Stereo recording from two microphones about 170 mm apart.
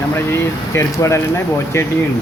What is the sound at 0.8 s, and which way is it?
Speech, 15° left (ahead or behind).